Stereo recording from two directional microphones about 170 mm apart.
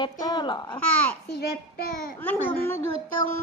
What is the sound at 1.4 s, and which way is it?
Speech, 65° left (ahead or behind).